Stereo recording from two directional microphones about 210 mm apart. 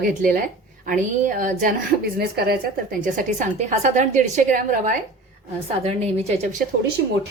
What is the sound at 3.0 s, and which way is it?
A woman's voice, 40° right (ahead or behind).